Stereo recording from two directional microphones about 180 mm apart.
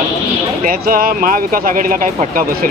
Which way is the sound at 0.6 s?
55° right (ahead or behind).